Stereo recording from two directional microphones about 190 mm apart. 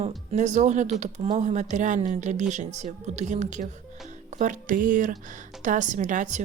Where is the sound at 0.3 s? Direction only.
40° right (ahead or behind).